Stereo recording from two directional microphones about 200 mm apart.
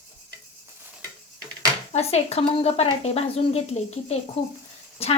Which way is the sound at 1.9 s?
30° left (ahead or behind).